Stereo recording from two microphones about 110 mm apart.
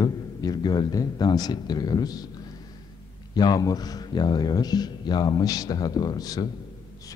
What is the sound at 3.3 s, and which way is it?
A man's voice, 40° left (ahead or behind).